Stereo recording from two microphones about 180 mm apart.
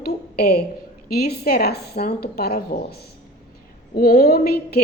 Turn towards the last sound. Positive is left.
turn(degrees=60)  # may be behind; listen again after turning